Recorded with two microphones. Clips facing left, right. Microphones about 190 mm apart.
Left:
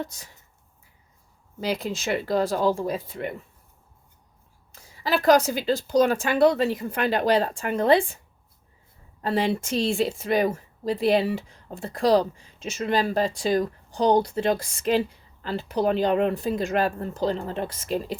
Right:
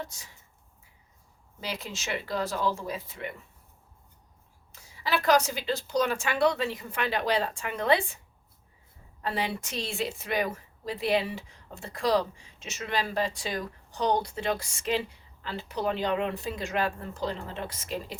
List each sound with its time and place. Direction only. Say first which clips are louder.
1.6 s speech: left 9 dB; 55° left (ahead or behind)
2.0 s speech: left 6 dB; 40° left (ahead or behind)
4.7 s a sound: left 4 dB; 50° left (ahead or behind)
5.5 s speech: left 7 dB; 45° left (ahead or behind)
9.2 s speech: left 7 dB; 45° left (ahead or behind)